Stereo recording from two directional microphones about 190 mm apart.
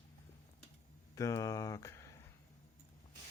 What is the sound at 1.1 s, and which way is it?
Speech, 15° left (ahead or behind).